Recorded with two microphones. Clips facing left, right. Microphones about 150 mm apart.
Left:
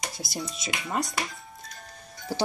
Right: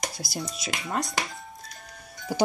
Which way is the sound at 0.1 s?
Centre (ahead or behind).